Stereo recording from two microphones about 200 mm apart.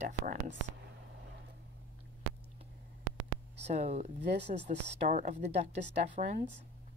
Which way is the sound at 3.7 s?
30° right (ahead or behind).